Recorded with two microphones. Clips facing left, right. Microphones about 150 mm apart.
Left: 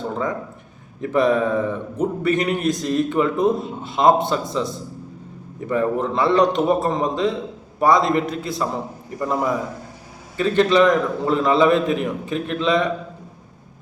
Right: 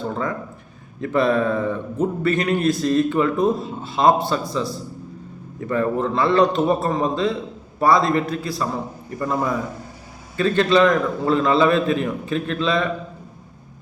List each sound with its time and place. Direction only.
1.1 s a man's voice: 15° left (ahead or behind)